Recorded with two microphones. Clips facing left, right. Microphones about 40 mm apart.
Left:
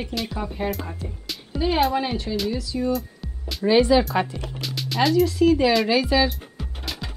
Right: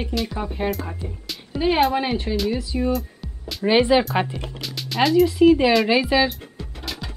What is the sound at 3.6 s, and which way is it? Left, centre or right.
Speech, right.